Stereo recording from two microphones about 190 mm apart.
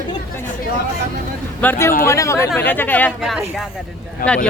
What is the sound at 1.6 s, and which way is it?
Speech, 10° left (ahead or behind).